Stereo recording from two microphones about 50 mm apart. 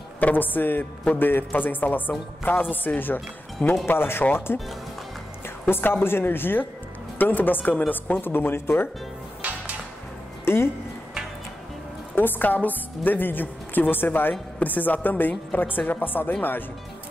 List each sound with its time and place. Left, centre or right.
0.2 s a woman's voice: left
5.7 s a woman's voice: left
9.4 s music: right
10.4 s music: left
12.2 s a woman's voice: left